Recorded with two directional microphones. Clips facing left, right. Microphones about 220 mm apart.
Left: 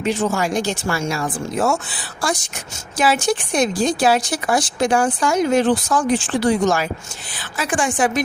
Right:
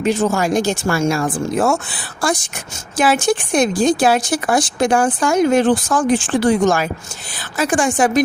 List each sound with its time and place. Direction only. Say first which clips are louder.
0.0 s speech: right 3 dB; 40° right (ahead or behind)